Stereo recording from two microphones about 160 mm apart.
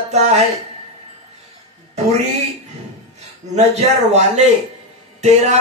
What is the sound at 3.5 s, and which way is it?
A man's voice, 45° right (ahead or behind).